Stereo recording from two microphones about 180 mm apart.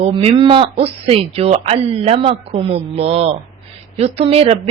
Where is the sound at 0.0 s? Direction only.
35° right (ahead or behind).